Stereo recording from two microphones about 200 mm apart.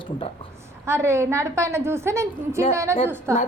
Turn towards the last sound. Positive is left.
turn(degrees=-15)  # may be behind; listen again after turning